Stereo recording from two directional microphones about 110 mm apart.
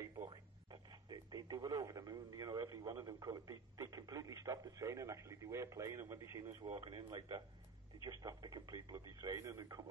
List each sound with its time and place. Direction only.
1.1 s speech: 35° right (ahead or behind)
6.7 s speech: 40° right (ahead or behind)